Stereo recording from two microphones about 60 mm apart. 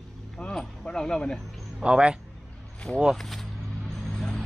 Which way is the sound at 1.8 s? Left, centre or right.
Centre.